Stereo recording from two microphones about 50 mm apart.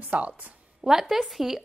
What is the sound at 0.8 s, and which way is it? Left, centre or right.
Speech, centre.